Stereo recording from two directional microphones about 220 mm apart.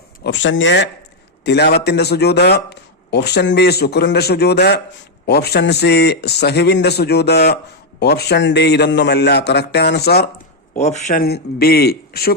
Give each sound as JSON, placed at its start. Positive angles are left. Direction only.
{"t": 0.2, "sound": "a man's voice", "side_deg": 55}
{"t": 10.8, "sound": "a man's voice", "side_deg": 30}